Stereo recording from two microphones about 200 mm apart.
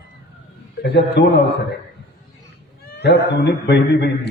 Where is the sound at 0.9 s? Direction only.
55° left (ahead or behind).